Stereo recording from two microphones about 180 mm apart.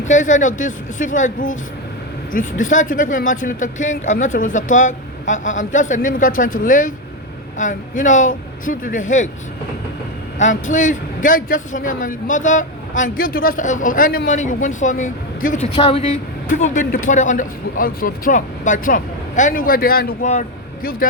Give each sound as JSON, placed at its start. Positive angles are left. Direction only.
{"t": 0.0, "sound": "a man's voice", "side_deg": 45}
{"t": 10.3, "sound": "a man's voice", "side_deg": 45}
{"t": 16.5, "sound": "a man's voice", "side_deg": 40}